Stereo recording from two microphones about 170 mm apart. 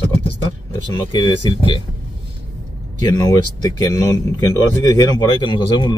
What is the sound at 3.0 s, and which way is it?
Speech, 20° left (ahead or behind).